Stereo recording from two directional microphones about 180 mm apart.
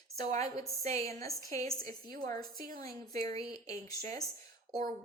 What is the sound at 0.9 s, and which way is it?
Speech, 15° left (ahead or behind).